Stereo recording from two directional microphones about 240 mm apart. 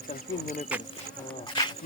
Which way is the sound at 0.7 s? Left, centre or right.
Centre.